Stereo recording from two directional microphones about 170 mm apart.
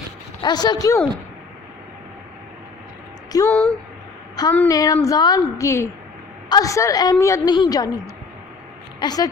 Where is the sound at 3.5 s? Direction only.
5° left (ahead or behind).